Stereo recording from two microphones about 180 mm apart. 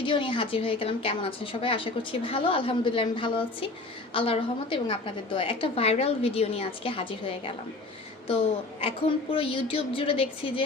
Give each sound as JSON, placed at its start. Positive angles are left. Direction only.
{"t": 0.0, "sound": "a woman's voice", "side_deg": 30}